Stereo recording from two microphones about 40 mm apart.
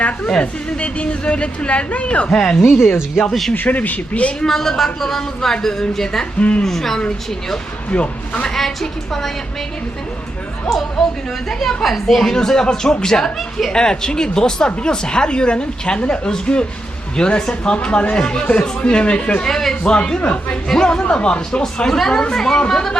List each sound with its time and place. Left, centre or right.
0.3 s a woman's voice: left
2.3 s speech: centre
2.6 s speech: left
3.5 s speech: left
4.4 s speech: centre
6.4 s a woman's voice: left
6.7 s speech: centre
7.9 s speech: left
8.5 s speech: centre
10.7 s speech: centre; by 19.5 s left
19.5 s speech: centre
21.6 s speech: centre